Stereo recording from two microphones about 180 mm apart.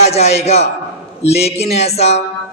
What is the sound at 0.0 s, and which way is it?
Speech, 35° left (ahead or behind).